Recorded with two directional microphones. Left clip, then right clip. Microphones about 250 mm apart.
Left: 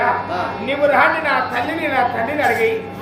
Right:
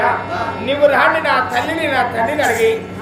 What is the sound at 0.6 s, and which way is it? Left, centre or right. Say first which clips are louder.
A woman's voice: right 2 dB; centre.